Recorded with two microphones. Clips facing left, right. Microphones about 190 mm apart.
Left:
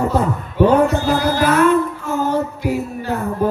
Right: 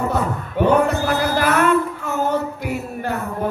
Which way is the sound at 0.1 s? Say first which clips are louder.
Left 3 dB; 60° right (ahead or behind).